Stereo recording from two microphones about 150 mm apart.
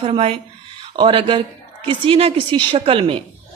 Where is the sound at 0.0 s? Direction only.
40° right (ahead or behind).